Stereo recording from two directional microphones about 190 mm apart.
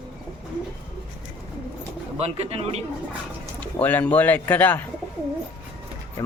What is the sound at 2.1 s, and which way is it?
Speech, 35° right (ahead or behind).